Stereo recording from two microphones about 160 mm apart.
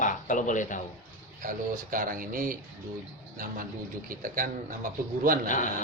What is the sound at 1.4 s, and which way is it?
Speech, 60° right (ahead or behind).